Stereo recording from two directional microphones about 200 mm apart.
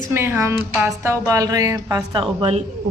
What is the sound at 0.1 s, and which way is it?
A woman's voice, 10° right (ahead or behind).